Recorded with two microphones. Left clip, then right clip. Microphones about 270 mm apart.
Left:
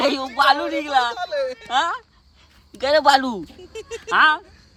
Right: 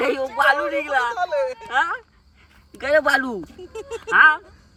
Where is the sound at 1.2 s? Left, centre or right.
Right.